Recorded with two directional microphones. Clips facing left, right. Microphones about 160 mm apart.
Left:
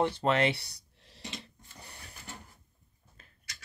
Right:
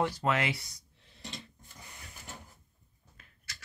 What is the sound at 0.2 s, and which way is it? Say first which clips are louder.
Speech: left 3 dB; 30° left (ahead or behind).